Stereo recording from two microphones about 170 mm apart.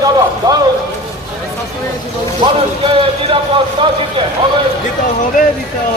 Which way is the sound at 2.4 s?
35° right (ahead or behind).